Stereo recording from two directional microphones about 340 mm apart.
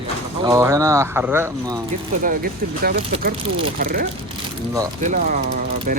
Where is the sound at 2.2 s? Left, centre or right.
Right.